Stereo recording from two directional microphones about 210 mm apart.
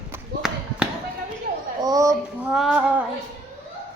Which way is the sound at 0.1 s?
5° right (ahead or behind).